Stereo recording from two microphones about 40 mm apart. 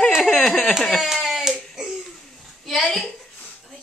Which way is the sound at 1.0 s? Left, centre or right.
Centre.